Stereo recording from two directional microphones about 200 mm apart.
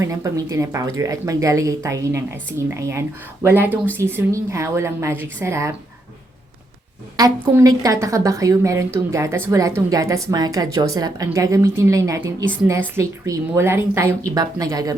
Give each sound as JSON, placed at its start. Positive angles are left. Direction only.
{"t": 0.0, "sound": "a woman's voice", "side_deg": -15}
{"t": 7.2, "sound": "a woman's voice", "side_deg": -20}